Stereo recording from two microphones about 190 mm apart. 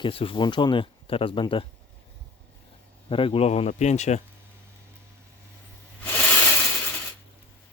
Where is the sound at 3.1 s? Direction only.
30° left (ahead or behind).